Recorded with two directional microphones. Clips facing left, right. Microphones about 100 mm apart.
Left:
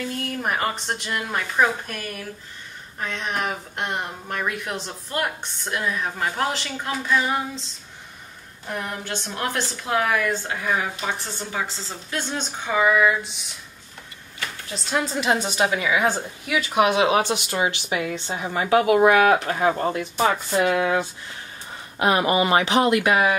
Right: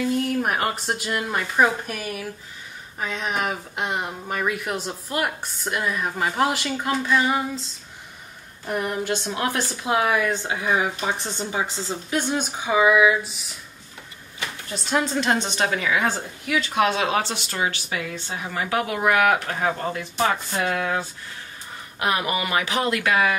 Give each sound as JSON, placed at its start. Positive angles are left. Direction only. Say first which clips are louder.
{"t": 0.0, "sound": "speech", "louder": "right 5 dB", "side_deg": -5}
{"t": 8.6, "sound": "speech", "louder": "right 5 dB", "side_deg": -10}
{"t": 14.7, "sound": "a woman's voice", "louder": "right 2 dB", "side_deg": 0}